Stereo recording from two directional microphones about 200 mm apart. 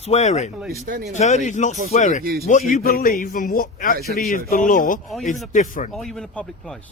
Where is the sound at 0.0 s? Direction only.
35° left (ahead or behind).